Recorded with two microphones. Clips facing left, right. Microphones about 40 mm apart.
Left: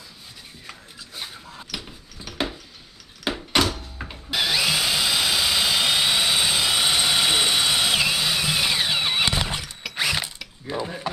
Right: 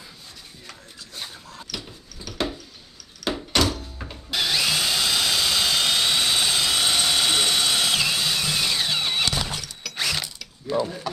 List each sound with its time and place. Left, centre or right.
0.7 s dog: centre
3.3 s drill: centre
10.2 s a sound: left